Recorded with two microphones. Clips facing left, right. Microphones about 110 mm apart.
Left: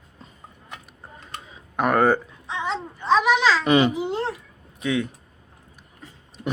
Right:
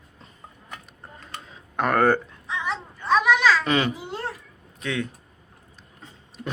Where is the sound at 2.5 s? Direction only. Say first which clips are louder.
Left 2 dB; 30° left (ahead or behind).